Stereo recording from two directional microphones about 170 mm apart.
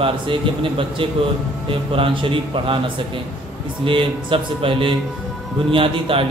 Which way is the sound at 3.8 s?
30° right (ahead or behind).